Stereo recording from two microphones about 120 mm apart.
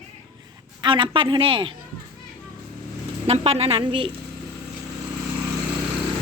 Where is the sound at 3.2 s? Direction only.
60° right (ahead or behind).